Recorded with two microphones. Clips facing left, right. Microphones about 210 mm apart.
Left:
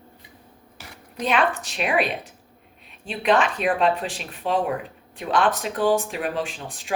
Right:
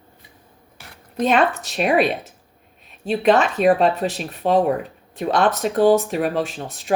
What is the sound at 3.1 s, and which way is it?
Speech, 40° right (ahead or behind).